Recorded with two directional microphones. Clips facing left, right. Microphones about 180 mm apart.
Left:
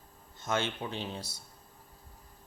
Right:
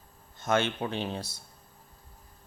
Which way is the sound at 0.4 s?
60° right (ahead or behind).